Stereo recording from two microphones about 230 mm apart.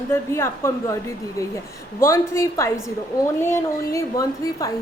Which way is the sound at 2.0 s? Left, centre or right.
Centre.